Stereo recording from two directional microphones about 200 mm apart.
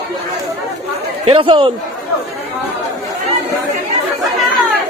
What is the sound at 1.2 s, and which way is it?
Speech, 25° right (ahead or behind).